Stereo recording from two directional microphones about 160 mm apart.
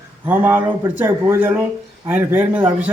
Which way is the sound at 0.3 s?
10° right (ahead or behind).